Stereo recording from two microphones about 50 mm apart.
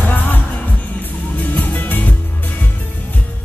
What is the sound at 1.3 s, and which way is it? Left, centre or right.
Music, left.